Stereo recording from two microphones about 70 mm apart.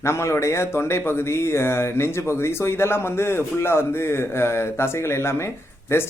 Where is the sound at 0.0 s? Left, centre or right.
Left.